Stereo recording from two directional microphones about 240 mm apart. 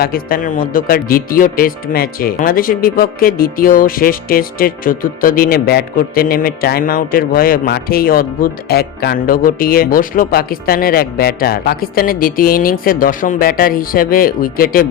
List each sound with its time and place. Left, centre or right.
0.0 s speech: left